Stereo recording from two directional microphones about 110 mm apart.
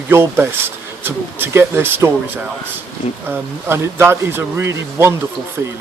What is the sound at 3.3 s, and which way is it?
Speech, 20° right (ahead or behind).